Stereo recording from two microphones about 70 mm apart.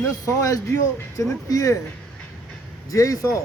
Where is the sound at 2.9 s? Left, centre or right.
Left.